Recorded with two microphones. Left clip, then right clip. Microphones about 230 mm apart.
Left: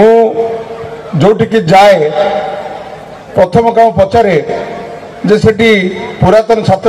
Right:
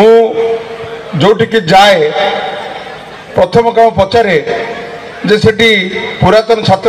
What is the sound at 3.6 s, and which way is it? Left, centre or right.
A man's voice, left.